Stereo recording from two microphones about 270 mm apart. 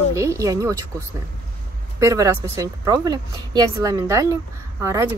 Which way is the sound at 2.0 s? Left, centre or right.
Centre.